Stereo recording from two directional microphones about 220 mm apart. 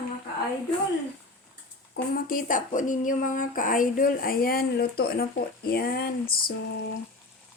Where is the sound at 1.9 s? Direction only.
40° left (ahead or behind).